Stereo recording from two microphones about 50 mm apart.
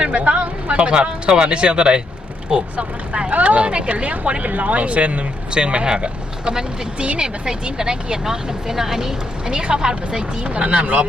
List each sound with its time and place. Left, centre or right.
0.0 s speech: right